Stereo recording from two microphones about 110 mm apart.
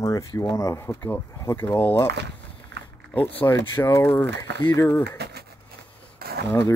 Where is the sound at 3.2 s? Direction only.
15° left (ahead or behind).